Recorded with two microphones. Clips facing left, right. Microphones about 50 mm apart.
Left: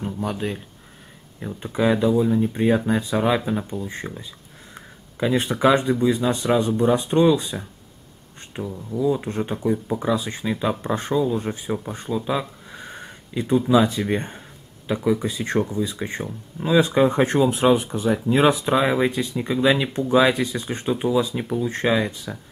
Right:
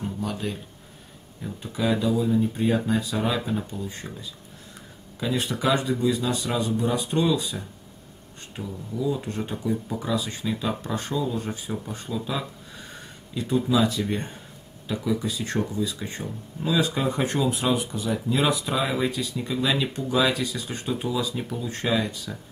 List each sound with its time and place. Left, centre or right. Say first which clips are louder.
0.0 s speech: left 3 dB; left